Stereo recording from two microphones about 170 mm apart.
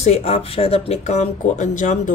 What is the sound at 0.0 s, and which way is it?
Speech, 35° left (ahead or behind).